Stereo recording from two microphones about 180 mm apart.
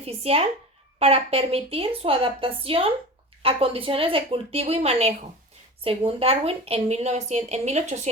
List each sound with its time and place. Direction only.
0.0 s a woman's voice: 35° right (ahead or behind)